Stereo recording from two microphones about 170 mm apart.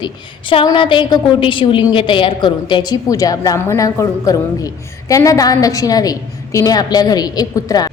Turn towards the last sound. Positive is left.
turn(degrees=20)  # may be behind; listen again after turning